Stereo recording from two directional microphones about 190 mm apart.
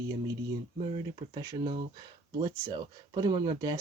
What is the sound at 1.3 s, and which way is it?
Speech, 20° right (ahead or behind).